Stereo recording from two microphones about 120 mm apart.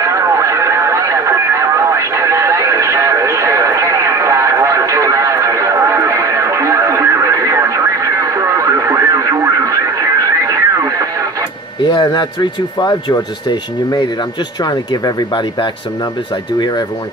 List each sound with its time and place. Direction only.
0.0 s radio: 25° right (ahead or behind)
11.8 s speech: 35° left (ahead or behind)